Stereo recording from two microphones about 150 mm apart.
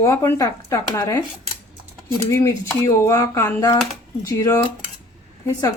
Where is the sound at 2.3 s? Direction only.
20° left (ahead or behind).